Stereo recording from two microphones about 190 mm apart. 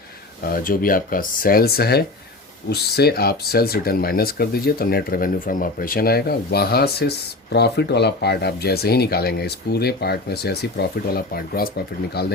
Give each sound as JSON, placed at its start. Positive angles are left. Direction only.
{"t": 0.4, "sound": "speech", "side_deg": 50}